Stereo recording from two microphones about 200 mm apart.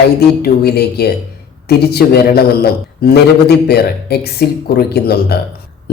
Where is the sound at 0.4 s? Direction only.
55° left (ahead or behind).